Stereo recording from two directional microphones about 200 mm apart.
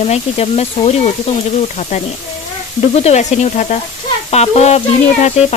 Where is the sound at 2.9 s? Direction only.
35° left (ahead or behind).